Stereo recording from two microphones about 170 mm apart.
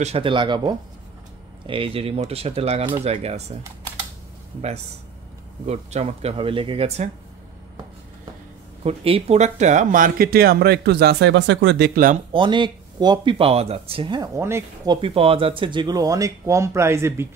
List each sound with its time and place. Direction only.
0.0 s speech: 35° right (ahead or behind)
5.7 s speech: 40° right (ahead or behind)
8.8 s speech: 35° right (ahead or behind); by 12.2 s 55° right (ahead or behind)
12.3 s speech: 30° right (ahead or behind)
15.0 s speech: 35° right (ahead or behind); by 17.3 s 15° right (ahead or behind)